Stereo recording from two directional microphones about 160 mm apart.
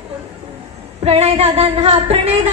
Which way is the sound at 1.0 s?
40° right (ahead or behind).